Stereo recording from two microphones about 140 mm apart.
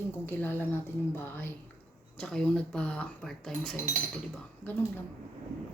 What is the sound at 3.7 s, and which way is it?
Speech, 65° right (ahead or behind).